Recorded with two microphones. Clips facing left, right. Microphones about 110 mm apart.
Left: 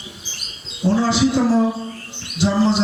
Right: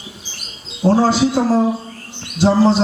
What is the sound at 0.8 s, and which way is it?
A man's voice, 45° right (ahead or behind).